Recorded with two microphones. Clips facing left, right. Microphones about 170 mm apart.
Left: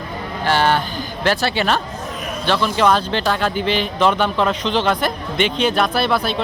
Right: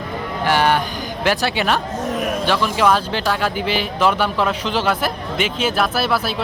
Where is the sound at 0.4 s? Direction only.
15° right (ahead or behind).